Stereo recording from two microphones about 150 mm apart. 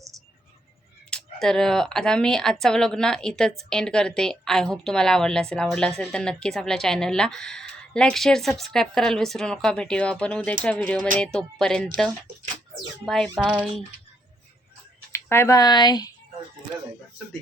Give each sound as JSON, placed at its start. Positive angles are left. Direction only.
{"t": 1.1, "sound": "a woman's voice", "side_deg": 5}
{"t": 13.1, "sound": "a woman's voice", "side_deg": 5}
{"t": 13.3, "sound": "speech", "side_deg": -5}
{"t": 15.1, "sound": "speech", "side_deg": 15}